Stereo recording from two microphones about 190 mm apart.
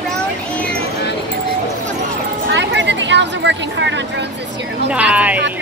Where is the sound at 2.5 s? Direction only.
70° right (ahead or behind).